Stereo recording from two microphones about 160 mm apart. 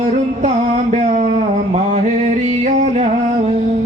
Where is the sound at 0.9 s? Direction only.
45° right (ahead or behind).